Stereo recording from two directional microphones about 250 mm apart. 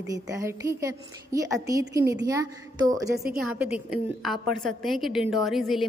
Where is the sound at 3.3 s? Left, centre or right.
Centre.